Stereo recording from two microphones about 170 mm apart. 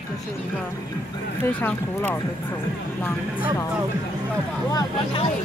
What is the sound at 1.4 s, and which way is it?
Speech, 10° left (ahead or behind).